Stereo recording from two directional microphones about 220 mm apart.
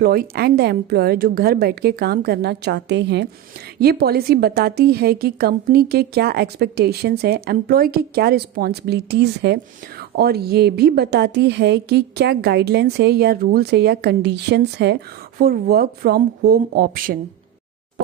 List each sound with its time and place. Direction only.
0.0 s a woman's voice: 40° right (ahead or behind)